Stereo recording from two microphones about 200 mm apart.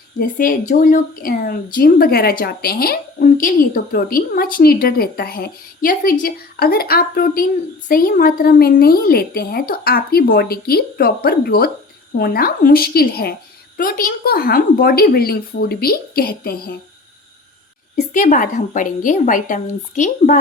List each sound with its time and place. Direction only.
0.2 s a woman's voice: 45° left (ahead or behind)
17.9 s a woman's voice: 40° left (ahead or behind)